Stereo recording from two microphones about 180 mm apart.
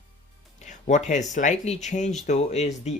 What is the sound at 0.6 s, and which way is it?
Speech, 45° left (ahead or behind).